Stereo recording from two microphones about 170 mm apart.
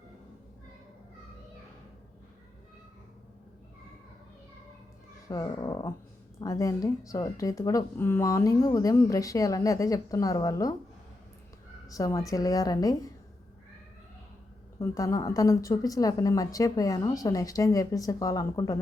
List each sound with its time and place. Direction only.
5.3 s speech: 20° left (ahead or behind)
11.9 s speech: 20° left (ahead or behind)
14.8 s speech: 20° left (ahead or behind)